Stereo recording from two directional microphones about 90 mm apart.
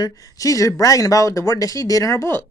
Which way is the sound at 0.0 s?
40° left (ahead or behind).